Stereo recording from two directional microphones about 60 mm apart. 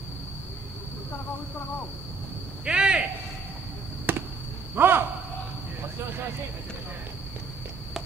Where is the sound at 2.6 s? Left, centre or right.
Centre.